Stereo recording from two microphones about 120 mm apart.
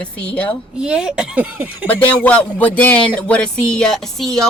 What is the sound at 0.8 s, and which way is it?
Speech, 5° right (ahead or behind).